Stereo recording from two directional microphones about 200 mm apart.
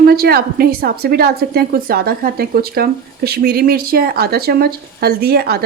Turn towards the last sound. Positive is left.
turn(degrees=-50)  # may be behind; listen again after turning